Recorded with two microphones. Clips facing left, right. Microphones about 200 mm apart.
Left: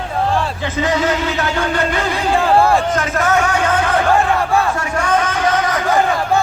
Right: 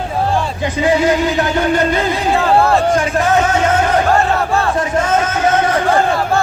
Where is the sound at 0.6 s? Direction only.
15° right (ahead or behind).